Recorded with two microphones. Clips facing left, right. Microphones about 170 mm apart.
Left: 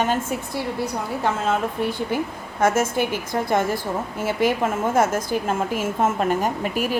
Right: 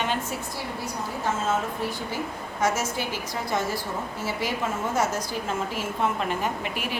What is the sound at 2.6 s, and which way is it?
A woman's voice, 50° left (ahead or behind).